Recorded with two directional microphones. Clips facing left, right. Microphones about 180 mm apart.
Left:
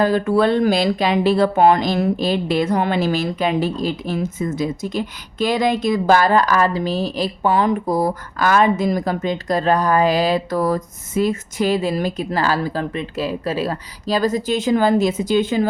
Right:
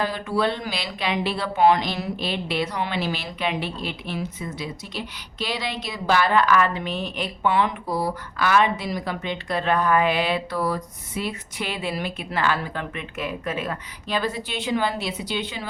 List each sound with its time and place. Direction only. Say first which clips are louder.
0.0 s speech: left 8 dB; 45° left (ahead or behind)